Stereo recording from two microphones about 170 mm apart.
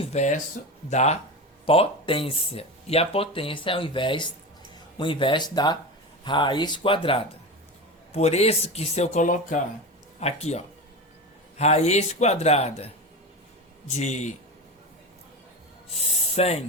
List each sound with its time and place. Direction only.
0.0 s a man's voice: 40° left (ahead or behind)
13.9 s a man's voice: 45° left (ahead or behind)
16.0 s speech: 40° left (ahead or behind)